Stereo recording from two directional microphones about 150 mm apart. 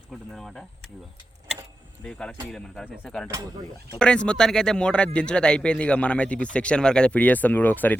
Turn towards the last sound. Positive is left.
turn(degrees=10)  # may be behind; listen again after turning